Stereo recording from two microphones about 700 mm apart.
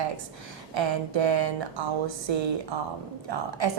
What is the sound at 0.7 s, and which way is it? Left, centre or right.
A woman's voice, right.